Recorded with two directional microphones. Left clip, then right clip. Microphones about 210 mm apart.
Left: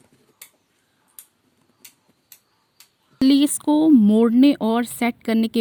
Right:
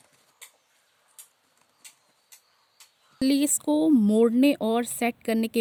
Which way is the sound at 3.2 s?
15° left (ahead or behind).